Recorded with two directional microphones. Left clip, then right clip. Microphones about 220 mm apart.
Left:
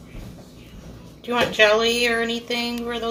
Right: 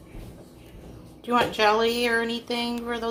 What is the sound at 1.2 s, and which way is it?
Speech, 30° right (ahead or behind).